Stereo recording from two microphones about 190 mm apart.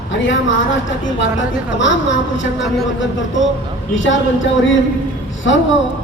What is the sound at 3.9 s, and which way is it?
Speech, 85° left.